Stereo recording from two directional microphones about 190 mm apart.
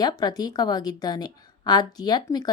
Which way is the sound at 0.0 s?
20° left (ahead or behind).